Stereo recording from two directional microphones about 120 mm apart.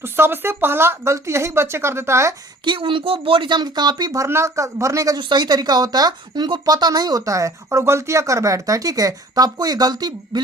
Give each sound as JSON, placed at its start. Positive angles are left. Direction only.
{"t": 0.0, "sound": "speech", "side_deg": -20}
{"t": 2.6, "sound": "speech", "side_deg": -45}